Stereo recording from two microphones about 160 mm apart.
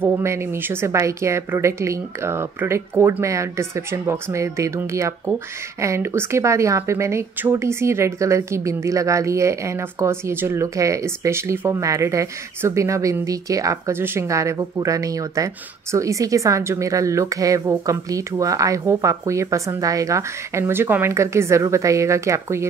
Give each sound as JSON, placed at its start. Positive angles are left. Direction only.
{"t": 0.0, "sound": "a woman's voice", "side_deg": -15}